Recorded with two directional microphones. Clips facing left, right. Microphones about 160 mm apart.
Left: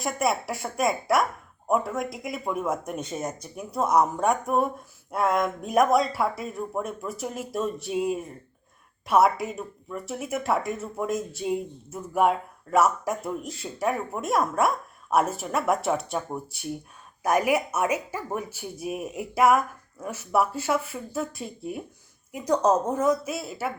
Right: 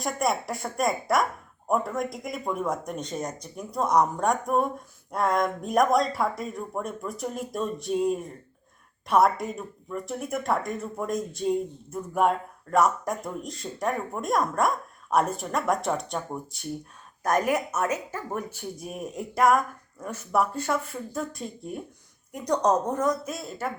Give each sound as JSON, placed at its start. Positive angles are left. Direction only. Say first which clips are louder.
{"t": 0.0, "sound": "speech", "louder": "left 1 dB", "side_deg": 5}